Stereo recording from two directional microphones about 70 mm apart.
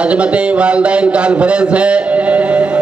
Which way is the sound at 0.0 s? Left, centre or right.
Centre.